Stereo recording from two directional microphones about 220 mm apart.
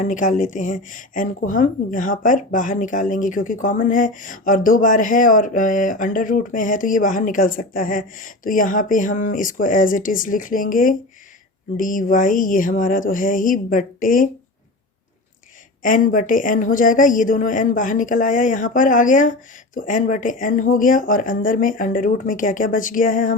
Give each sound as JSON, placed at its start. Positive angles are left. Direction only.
{"t": 0.0, "sound": "speech", "side_deg": 35}
{"t": 15.8, "sound": "speech", "side_deg": 40}